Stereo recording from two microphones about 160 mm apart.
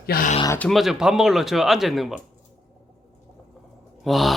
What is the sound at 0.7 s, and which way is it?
Speech, centre (ahead or behind).